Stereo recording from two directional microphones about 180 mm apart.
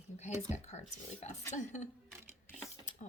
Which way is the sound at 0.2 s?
40° left (ahead or behind).